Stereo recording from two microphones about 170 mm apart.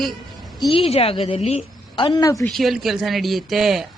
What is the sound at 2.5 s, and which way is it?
A man's voice, centre (ahead or behind).